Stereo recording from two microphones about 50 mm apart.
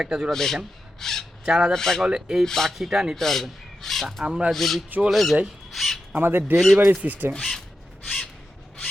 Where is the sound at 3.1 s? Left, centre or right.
Centre.